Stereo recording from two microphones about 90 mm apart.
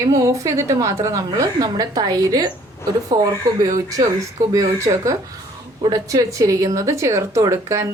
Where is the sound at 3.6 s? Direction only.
45° right (ahead or behind).